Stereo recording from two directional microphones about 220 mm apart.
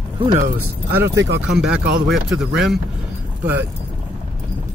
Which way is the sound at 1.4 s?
5° right (ahead or behind).